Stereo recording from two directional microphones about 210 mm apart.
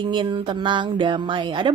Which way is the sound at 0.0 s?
20° right (ahead or behind).